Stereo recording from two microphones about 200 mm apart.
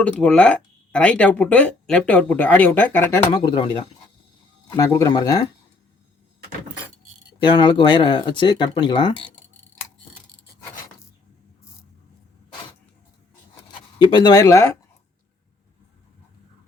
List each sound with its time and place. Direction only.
0.0 s speech: 5° left (ahead or behind)
3.4 s speech: 25° left (ahead or behind)
4.8 s speech: 15° left (ahead or behind)
7.4 s speech: 25° left (ahead or behind)
14.0 s speech: 20° left (ahead or behind)